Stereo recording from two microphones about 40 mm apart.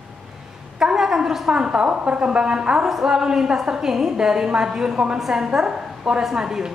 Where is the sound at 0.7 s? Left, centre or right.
Centre.